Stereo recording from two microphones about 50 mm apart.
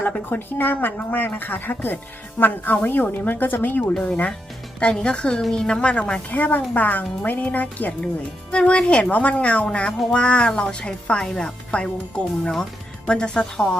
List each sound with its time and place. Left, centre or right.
0.0 s speech: left
4.8 s a woman's voice: left
6.3 s speech: left
8.5 s a woman's voice: left